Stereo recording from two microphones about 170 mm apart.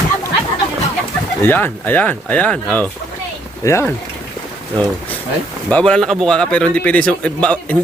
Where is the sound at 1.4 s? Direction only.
10° left (ahead or behind).